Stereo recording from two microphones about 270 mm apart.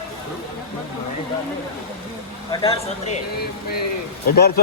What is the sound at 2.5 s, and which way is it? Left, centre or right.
Speech, centre.